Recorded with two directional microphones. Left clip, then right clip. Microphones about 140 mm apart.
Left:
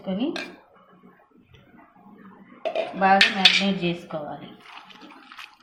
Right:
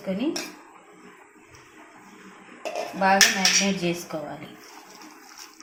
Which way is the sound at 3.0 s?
20° right (ahead or behind).